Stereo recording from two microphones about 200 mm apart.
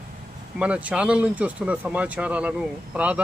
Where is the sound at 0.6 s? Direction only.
5° right (ahead or behind).